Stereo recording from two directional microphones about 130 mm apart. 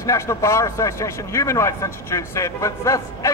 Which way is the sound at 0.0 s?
25° left (ahead or behind).